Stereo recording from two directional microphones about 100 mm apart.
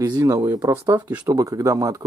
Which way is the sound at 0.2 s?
30° right (ahead or behind).